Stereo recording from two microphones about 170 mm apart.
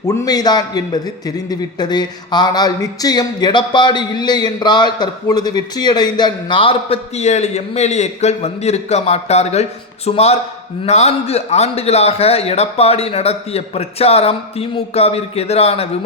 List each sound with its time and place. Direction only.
0.0 s a man's voice: 20° left (ahead or behind); by 15.9 s 35° left (ahead or behind)